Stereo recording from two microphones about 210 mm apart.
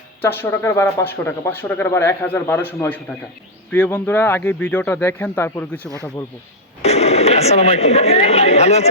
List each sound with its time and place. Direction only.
0.2 s speech: 10° left (ahead or behind)
6.8 s speech: 30° left (ahead or behind)